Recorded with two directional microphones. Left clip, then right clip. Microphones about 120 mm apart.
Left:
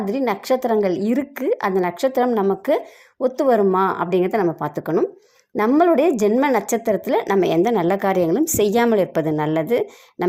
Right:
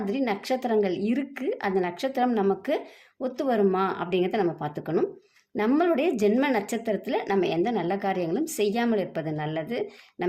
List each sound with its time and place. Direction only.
0.0 s a woman's voice: 45° left (ahead or behind); by 10.2 s 65° left (ahead or behind)